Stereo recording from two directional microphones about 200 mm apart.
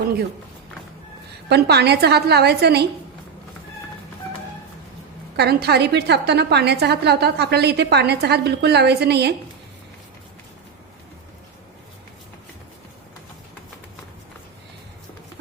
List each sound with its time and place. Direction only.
1.5 s a woman's voice: 55° right (ahead or behind)
5.4 s a woman's voice: 55° right (ahead or behind)